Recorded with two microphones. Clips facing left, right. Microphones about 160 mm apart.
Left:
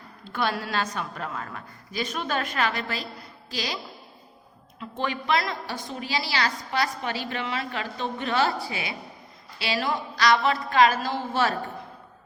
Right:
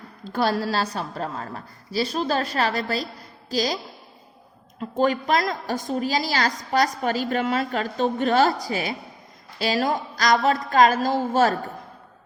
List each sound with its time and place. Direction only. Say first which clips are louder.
0.3 s a woman's voice: right 5 dB; 40° right (ahead or behind)
4.8 s a woman's voice: right 8 dB; 40° right (ahead or behind)